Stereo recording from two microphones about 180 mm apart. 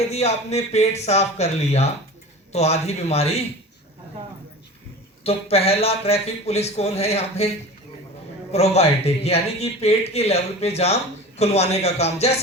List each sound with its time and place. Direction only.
0.0 s speech: 35° left (ahead or behind)
5.2 s speech: 35° left (ahead or behind)
8.5 s speech: 35° left (ahead or behind)